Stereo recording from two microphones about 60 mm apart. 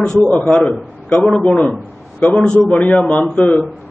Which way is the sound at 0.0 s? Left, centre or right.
Centre.